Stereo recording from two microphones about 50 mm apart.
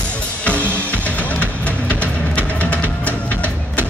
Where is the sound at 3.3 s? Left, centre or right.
Right.